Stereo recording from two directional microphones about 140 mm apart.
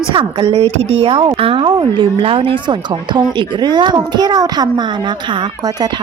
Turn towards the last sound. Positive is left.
turn(degrees=-30)  # may be behind; listen again after turning